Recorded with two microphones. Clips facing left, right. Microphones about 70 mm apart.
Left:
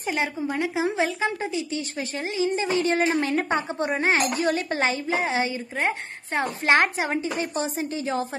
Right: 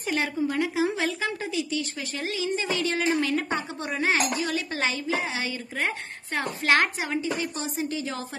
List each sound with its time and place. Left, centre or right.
0.0 s a woman's voice: centre